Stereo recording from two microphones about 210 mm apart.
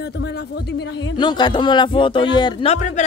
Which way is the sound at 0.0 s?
50° left (ahead or behind).